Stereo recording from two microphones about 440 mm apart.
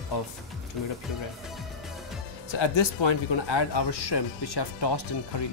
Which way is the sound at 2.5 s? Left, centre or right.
Left.